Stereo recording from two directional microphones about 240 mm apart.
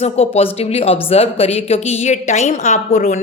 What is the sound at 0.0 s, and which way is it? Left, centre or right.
A woman's voice, left.